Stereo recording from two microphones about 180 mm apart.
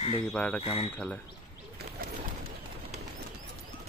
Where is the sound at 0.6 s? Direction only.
35° left (ahead or behind).